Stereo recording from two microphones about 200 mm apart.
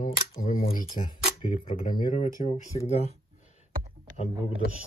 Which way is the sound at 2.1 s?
40° left (ahead or behind).